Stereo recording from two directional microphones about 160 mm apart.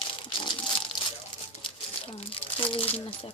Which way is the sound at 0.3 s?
30° left (ahead or behind).